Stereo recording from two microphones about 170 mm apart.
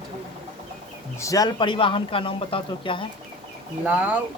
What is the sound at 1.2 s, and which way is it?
Speech, 20° left (ahead or behind).